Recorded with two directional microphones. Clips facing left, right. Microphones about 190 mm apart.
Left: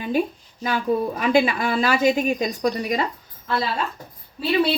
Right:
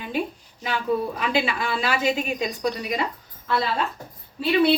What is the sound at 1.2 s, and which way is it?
A woman's voice, 45° left (ahead or behind).